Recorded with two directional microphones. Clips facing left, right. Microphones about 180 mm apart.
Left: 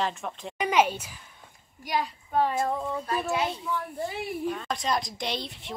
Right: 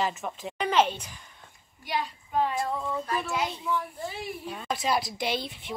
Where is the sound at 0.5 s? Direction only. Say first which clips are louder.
Left 1 dB; 10° left (ahead or behind).